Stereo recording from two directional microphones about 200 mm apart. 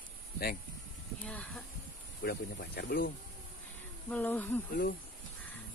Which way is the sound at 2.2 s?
55° left (ahead or behind).